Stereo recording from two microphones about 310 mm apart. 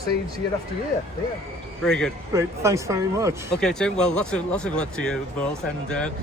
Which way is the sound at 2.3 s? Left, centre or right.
Centre.